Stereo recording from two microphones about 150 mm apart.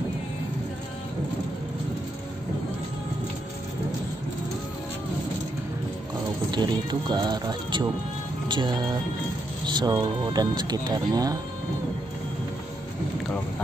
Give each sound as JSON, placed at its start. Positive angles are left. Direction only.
{"t": 6.5, "sound": "speech", "side_deg": -30}
{"t": 8.5, "sound": "music", "side_deg": -30}
{"t": 9.7, "sound": "speech", "side_deg": -30}